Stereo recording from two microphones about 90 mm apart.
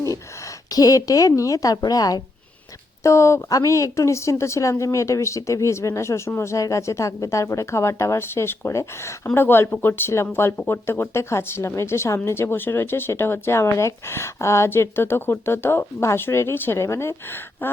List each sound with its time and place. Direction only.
0.7 s a woman's voice: 45° left (ahead or behind)
3.0 s a woman's voice: 35° left (ahead or behind)